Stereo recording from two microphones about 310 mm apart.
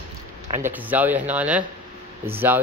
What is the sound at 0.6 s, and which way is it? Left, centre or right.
Speech, centre.